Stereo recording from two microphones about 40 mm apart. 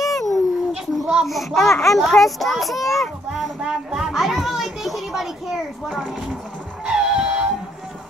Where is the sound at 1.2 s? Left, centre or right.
Centre.